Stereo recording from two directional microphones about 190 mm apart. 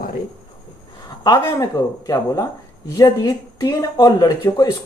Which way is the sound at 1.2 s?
20° left (ahead or behind).